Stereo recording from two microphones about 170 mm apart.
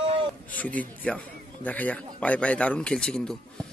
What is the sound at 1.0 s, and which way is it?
A man's voice, 10° left (ahead or behind).